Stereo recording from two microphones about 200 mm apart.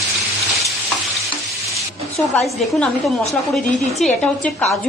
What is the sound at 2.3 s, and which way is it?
A woman's voice, 5° left (ahead or behind).